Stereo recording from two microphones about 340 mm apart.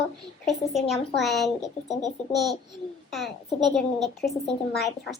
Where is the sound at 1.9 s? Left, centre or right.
Centre.